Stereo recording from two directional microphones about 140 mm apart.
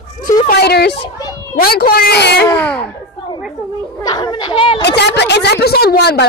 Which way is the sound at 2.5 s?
10° left (ahead or behind).